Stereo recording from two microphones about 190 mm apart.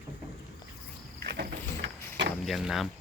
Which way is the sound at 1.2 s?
50° right (ahead or behind).